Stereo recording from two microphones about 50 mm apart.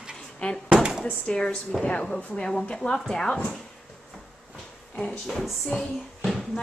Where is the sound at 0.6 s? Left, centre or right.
Right.